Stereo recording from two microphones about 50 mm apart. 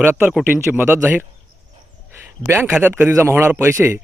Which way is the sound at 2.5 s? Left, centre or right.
Right.